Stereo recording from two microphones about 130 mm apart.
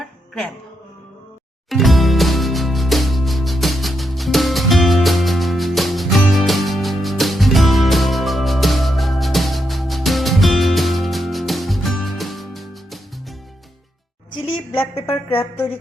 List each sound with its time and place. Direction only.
1.7 s music: centre (ahead or behind)
14.5 s a sound: 45° left (ahead or behind)
15.3 s a woman's voice: 15° left (ahead or behind)